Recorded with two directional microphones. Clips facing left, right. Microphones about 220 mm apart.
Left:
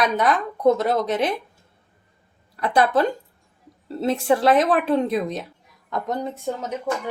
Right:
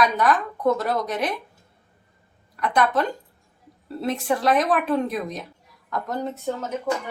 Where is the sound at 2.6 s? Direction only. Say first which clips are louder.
Left 3 dB; 30° left (ahead or behind).